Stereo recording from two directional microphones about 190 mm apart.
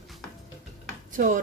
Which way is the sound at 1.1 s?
40° right (ahead or behind).